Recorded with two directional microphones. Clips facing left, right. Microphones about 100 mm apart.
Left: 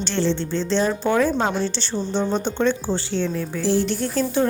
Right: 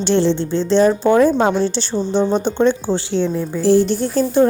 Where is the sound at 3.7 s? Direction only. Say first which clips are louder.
Right 8 dB; 40° right (ahead or behind).